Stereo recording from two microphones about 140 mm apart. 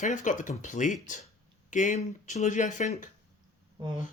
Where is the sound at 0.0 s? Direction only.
65° left (ahead or behind).